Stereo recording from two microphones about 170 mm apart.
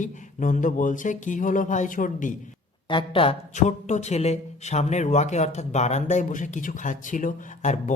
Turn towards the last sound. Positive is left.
turn(degrees=45)  # may be behind; listen again after turning